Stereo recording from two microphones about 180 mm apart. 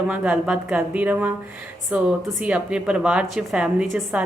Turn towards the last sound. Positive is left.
turn(degrees=-5)  # may be behind; listen again after turning